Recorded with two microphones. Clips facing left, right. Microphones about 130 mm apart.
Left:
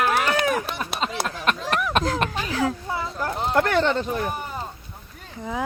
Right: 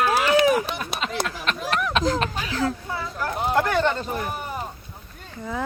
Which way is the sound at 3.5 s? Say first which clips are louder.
Left 2 dB; 65° left (ahead or behind).